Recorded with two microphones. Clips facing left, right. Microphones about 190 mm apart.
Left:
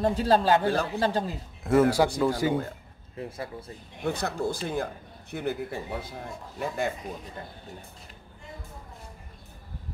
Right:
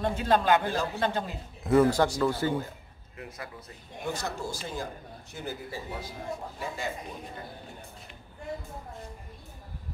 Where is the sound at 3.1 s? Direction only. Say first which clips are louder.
Left 6 dB; 30° left (ahead or behind).